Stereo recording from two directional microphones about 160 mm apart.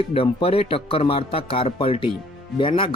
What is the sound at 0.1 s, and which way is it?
Speech, 35° left (ahead or behind).